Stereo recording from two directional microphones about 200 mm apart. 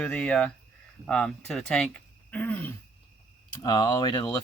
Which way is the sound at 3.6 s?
20° left (ahead or behind).